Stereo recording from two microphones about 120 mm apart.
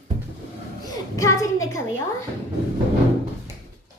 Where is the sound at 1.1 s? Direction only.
25° left (ahead or behind).